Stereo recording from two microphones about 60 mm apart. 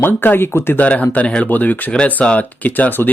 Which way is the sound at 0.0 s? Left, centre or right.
Left.